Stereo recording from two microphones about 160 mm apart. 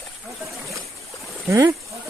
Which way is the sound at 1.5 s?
25° right (ahead or behind).